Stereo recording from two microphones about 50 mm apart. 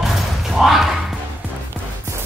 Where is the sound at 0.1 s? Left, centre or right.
Centre.